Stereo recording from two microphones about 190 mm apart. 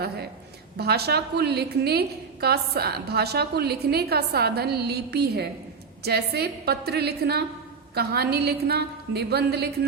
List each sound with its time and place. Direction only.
0.8 s a woman's voice: 55° right (ahead or behind)